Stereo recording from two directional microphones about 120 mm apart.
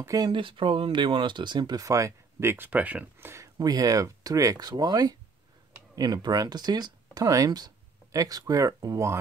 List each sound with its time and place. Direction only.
0.0 s speech: 30° right (ahead or behind)
3.5 s speech: 35° right (ahead or behind)